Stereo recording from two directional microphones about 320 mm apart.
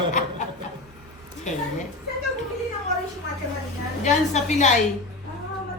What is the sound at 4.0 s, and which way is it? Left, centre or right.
Speech, left.